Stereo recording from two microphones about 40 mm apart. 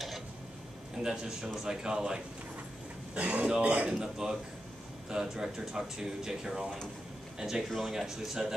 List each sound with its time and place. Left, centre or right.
0.9 s speech: centre
3.2 s speech: right; by 8.5 s centre